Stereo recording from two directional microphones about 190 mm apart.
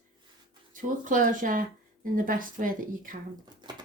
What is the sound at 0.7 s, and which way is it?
Speech, 45° right (ahead or behind).